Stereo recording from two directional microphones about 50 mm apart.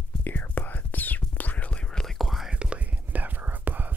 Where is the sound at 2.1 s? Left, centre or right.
Centre.